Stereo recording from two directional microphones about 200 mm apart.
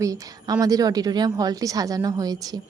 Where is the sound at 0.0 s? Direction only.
15° right (ahead or behind).